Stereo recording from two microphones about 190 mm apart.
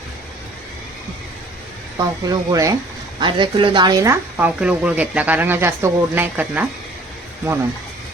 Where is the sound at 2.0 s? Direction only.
20° right (ahead or behind).